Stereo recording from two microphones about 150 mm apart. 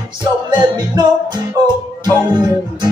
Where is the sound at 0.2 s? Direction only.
30° right (ahead or behind).